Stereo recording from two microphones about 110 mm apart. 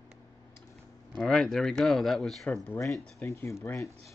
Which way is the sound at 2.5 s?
25° left (ahead or behind).